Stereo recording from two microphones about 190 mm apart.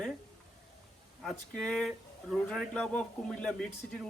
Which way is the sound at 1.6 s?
5° left (ahead or behind).